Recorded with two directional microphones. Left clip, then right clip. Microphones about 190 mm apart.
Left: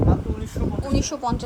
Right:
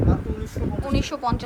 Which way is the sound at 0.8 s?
15° left (ahead or behind).